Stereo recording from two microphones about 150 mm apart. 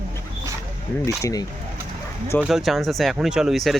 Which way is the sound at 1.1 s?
20° left (ahead or behind).